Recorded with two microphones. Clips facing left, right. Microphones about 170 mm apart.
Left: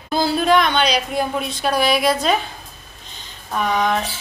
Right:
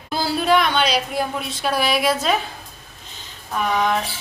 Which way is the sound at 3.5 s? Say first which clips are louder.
Left 1 dB; centre (ahead or behind).